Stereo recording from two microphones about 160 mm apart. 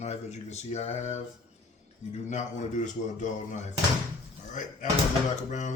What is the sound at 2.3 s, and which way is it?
A man's voice, 50° left (ahead or behind).